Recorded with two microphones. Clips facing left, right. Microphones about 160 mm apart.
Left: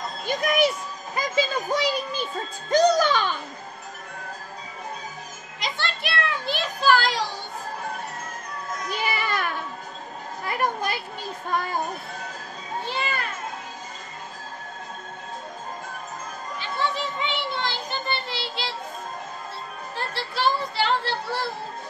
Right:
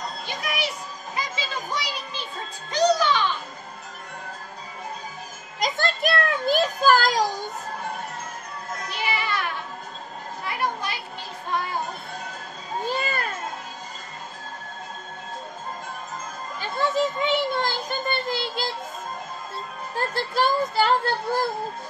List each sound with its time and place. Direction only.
0.3 s music: 45° left (ahead or behind)
1.1 s a sound: 45° left (ahead or behind)
2.7 s a child's voice: 45° left (ahead or behind)
5.6 s a sound: 45° right (ahead or behind)
10.4 s children playing: 45° left (ahead or behind)
12.8 s children playing: 45° right (ahead or behind)
16.5 s children playing: 45° right (ahead or behind)
20.0 s speech: 45° right (ahead or behind)